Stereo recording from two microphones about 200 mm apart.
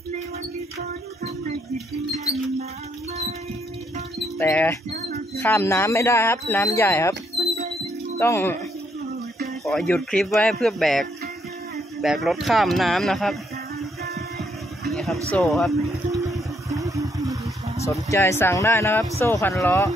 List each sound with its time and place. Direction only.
4.4 s speech: 10° left (ahead or behind)
8.2 s speech: 10° left (ahead or behind)
9.7 s speech: 5° left (ahead or behind)
14.9 s a sound: centre (ahead or behind)
15.3 s speech: centre (ahead or behind)
16.3 s music: 15° right (ahead or behind)
17.8 s speech: 15° left (ahead or behind)